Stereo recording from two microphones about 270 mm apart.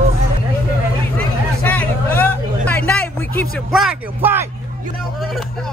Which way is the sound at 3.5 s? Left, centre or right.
Centre.